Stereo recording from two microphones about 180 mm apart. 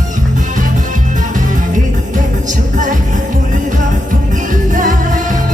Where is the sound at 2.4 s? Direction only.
45° right (ahead or behind).